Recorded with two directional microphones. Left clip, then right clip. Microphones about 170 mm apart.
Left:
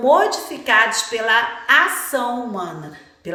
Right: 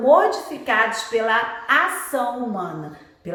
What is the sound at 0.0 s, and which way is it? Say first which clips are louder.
A woman's voice: even; 40° left (ahead or behind).